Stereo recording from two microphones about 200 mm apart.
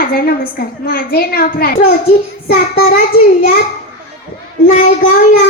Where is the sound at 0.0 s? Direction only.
45° left (ahead or behind).